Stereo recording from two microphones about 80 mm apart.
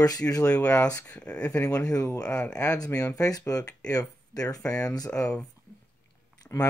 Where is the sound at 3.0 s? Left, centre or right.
Left.